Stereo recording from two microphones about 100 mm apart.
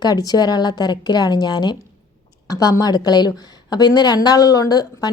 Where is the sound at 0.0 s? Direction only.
40° left (ahead or behind).